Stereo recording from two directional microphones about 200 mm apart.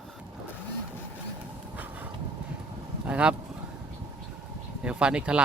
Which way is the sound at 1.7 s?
10° right (ahead or behind).